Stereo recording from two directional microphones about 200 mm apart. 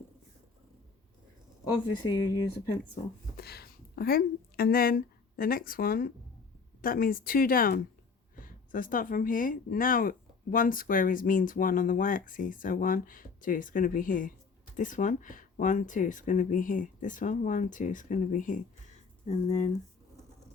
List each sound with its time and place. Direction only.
2.0 s speech: 15° left (ahead or behind)
3.3 s speech: 50° left (ahead or behind); by 19.7 s 35° left (ahead or behind)